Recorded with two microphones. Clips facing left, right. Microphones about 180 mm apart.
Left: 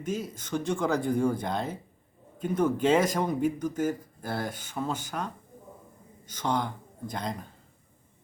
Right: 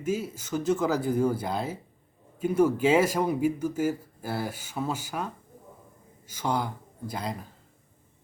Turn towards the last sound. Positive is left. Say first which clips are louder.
# even
turn(degrees=-5)  # may be behind; listen again after turning